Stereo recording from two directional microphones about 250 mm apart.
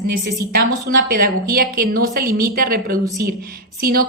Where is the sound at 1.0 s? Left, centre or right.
Right.